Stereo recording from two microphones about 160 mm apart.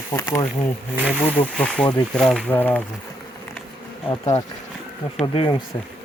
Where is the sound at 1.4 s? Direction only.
30° left (ahead or behind).